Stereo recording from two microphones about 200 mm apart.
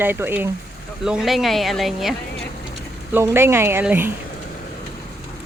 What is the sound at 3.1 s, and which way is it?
Speech, 10° right (ahead or behind).